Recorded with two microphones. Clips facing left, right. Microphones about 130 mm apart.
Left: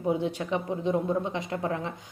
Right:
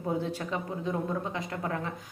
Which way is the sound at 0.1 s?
20° left (ahead or behind).